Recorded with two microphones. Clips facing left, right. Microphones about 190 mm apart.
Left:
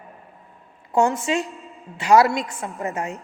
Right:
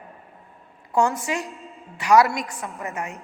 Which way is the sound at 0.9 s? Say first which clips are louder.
Left 2 dB; 25° left (ahead or behind).